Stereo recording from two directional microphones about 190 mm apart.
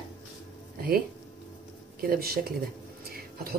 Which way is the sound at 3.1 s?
55° right (ahead or behind).